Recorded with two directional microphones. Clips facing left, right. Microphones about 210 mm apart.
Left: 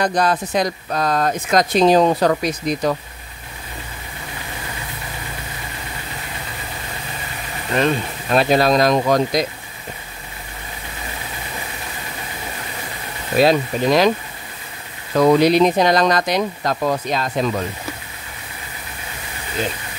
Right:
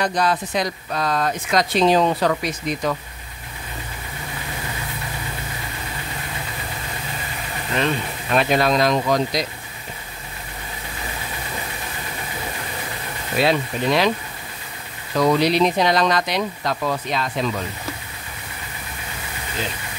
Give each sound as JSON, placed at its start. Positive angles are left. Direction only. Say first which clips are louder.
{"t": 0.0, "sound": "speech", "louder": "left 3 dB", "side_deg": 45}
{"t": 8.3, "sound": "speech", "louder": "left 3 dB", "side_deg": 35}
{"t": 13.4, "sound": "speech", "louder": "left 5 dB", "side_deg": 40}
{"t": 15.1, "sound": "speech", "louder": "left 4 dB", "side_deg": 50}